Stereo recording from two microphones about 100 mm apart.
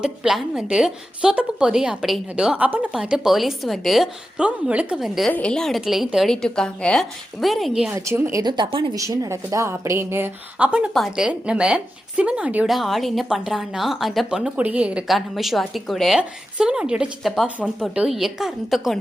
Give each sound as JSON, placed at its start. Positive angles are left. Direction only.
{"t": 0.0, "sound": "a woman's voice", "side_deg": -5}
{"t": 2.9, "sound": "a woman's voice", "side_deg": -5}
{"t": 5.3, "sound": "a woman's voice", "side_deg": 10}
{"t": 7.9, "sound": "a woman's voice", "side_deg": -25}
{"t": 8.4, "sound": "speech", "side_deg": -45}
{"t": 8.7, "sound": "speech", "side_deg": -60}
{"t": 9.0, "sound": "a woman's voice", "side_deg": -30}
{"t": 10.9, "sound": "a woman's voice", "side_deg": 0}
{"t": 12.6, "sound": "a woman's voice", "side_deg": 0}
{"t": 15.0, "sound": "a woman's voice", "side_deg": 0}